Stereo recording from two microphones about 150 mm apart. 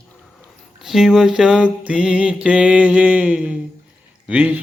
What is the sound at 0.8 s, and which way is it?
Mantra, 5° right (ahead or behind).